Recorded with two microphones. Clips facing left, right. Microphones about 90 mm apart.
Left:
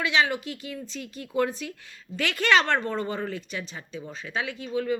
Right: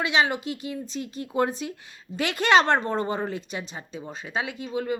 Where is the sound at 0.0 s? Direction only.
20° right (ahead or behind).